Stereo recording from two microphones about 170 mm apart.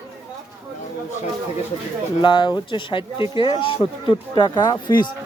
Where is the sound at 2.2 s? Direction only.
25° left (ahead or behind).